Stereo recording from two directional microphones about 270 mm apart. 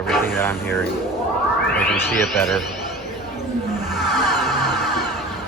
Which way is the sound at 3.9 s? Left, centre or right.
Centre.